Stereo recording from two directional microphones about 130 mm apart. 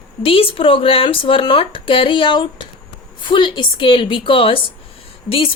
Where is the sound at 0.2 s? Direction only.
45° left (ahead or behind).